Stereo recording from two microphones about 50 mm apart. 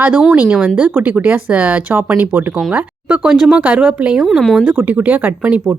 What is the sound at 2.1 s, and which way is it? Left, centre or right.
Speech, right.